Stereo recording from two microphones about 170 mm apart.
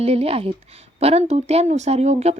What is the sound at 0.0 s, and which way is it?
Speech, 35° right (ahead or behind).